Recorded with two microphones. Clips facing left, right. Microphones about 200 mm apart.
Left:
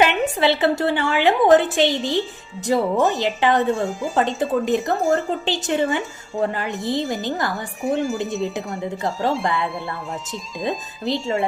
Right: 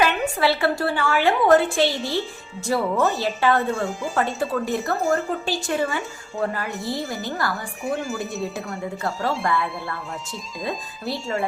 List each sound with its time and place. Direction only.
0.0 s a woman's voice: 20° left (ahead or behind)
10.6 s a woman's voice: 20° left (ahead or behind)